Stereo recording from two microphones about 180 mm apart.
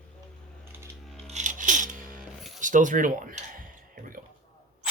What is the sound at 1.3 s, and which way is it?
Music, 45° right (ahead or behind).